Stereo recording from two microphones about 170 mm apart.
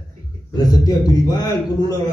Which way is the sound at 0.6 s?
25° left (ahead or behind).